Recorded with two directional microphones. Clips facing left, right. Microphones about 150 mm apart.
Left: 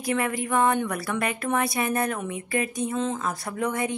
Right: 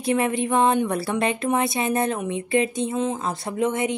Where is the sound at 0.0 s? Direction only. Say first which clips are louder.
Right 4 dB; 25° right (ahead or behind).